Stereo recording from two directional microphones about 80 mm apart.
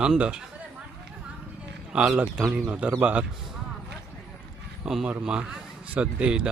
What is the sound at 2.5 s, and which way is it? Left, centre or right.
Speech, centre.